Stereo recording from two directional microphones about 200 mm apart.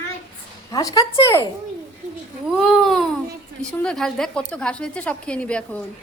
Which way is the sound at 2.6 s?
Centre (ahead or behind).